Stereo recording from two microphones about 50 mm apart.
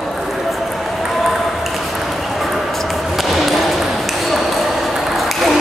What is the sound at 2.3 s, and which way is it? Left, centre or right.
Ping, centre.